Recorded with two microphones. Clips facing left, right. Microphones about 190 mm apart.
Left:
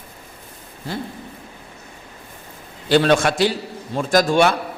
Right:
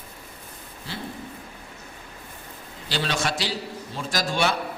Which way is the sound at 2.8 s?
55° left (ahead or behind).